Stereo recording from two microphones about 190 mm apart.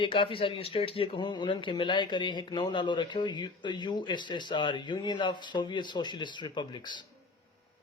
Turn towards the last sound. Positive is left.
turn(degrees=25)  # may be behind; listen again after turning